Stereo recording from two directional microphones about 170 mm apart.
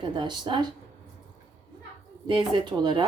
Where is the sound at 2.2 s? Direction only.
25° right (ahead or behind).